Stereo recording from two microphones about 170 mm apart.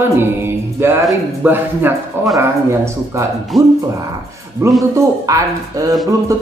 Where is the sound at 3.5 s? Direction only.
Centre (ahead or behind).